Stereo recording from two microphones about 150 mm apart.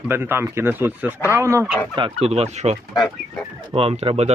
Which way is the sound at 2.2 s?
45° right (ahead or behind).